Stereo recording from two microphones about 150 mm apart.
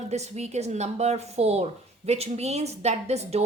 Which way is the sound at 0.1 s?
50° right (ahead or behind).